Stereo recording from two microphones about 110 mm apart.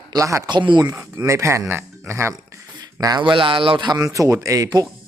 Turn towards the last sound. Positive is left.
turn(degrees=-30)  # may be behind; listen again after turning